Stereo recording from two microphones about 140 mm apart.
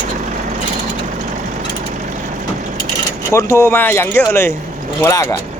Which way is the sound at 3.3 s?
20° left (ahead or behind).